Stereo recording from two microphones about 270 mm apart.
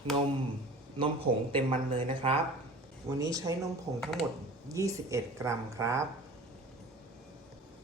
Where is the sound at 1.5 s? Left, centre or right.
Centre.